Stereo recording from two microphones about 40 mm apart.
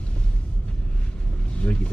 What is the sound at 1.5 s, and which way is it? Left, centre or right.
Vehicle, left.